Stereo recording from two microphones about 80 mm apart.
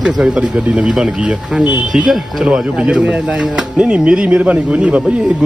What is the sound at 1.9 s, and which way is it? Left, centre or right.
Speech, centre.